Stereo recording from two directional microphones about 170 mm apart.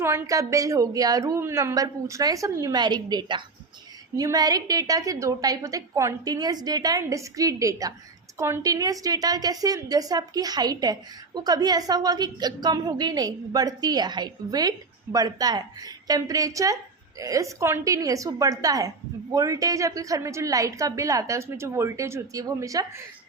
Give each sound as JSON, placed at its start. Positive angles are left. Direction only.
{"t": 0.0, "sound": "a woman's voice", "side_deg": -15}